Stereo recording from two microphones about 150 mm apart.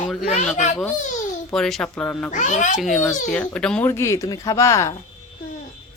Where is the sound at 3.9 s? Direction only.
20° left (ahead or behind).